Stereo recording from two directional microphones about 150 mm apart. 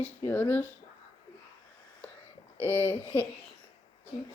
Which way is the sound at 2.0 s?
10° left (ahead or behind).